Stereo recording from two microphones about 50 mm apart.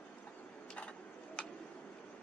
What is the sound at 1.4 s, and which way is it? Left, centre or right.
Tick-tock, centre.